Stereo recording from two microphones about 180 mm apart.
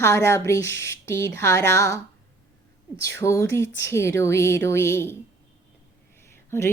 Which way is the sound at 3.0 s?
15° left (ahead or behind).